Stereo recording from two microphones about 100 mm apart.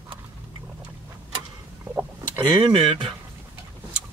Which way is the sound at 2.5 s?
60° right (ahead or behind).